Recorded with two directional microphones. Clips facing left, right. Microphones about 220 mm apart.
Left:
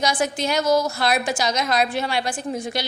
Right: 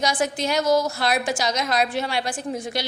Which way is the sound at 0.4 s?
35° right (ahead or behind).